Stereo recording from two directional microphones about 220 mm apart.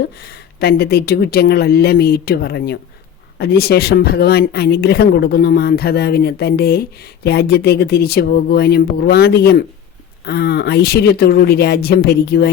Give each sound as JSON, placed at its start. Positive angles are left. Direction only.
{"t": 0.3, "sound": "speech", "side_deg": 45}